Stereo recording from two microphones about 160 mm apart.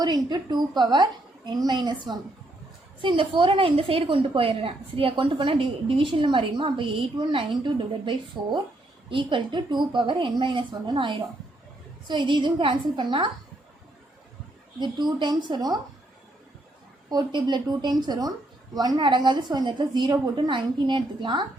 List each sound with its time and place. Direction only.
0.0 s a woman's voice: 25° right (ahead or behind)
14.8 s speech: 25° right (ahead or behind)
17.1 s speech: 25° right (ahead or behind)